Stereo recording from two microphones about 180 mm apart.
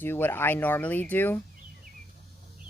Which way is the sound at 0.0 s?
10° left (ahead or behind).